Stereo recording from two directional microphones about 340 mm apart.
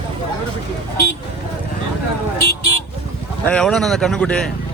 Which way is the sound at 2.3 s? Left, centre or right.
Left.